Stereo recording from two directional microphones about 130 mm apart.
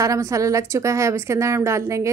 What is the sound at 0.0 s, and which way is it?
A woman's voice, 25° right (ahead or behind).